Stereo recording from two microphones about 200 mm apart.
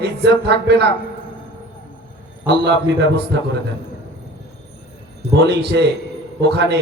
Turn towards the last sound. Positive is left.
turn(degrees=-55)  # may be behind; listen again after turning